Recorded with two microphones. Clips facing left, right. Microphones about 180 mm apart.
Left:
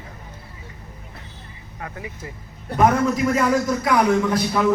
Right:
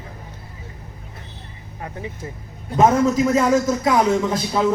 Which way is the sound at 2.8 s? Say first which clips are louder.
Right 2 dB; 25° right (ahead or behind).